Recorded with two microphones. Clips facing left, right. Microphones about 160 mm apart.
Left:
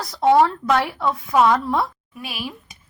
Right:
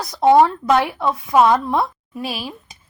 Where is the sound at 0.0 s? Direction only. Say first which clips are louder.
Right 3 dB; 20° right (ahead or behind).